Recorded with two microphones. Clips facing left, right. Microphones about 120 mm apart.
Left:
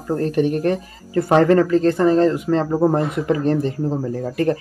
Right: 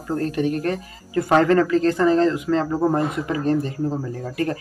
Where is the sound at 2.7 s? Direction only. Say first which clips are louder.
Left 3 dB; 30° left (ahead or behind).